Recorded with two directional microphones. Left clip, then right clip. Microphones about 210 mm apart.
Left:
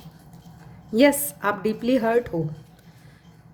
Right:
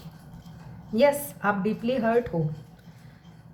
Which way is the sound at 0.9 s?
50° left (ahead or behind).